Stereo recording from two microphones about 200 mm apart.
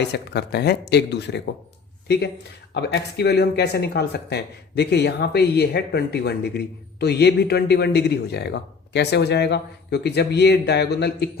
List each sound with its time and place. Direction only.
0.0 s speech: 55° left (ahead or behind)
2.7 s speech: 55° left (ahead or behind)